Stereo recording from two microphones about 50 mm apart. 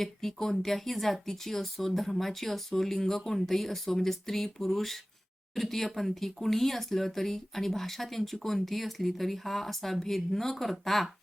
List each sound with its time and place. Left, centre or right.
0.0 s speech: centre